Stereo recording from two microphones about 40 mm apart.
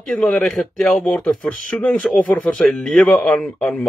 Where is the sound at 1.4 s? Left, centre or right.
Left.